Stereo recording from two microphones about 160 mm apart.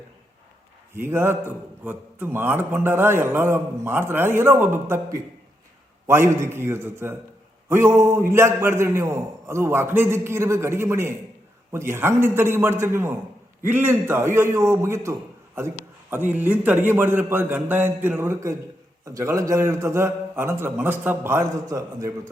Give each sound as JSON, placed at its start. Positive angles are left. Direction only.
{"t": 0.9, "sound": "a man's voice", "side_deg": -15}